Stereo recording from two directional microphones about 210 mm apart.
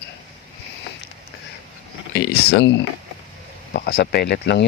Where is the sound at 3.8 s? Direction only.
50° left (ahead or behind).